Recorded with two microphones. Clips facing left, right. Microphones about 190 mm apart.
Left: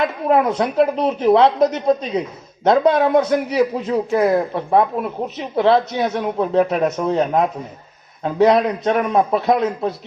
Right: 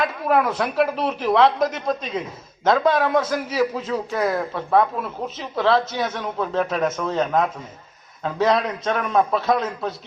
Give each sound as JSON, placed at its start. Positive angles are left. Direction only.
{"t": 0.0, "sound": "speech", "side_deg": 25}